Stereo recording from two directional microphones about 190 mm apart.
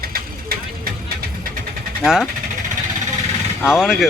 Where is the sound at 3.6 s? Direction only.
5° right (ahead or behind).